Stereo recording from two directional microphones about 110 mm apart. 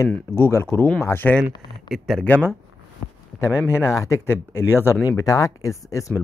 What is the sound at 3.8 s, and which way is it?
Speech, 30° left (ahead or behind).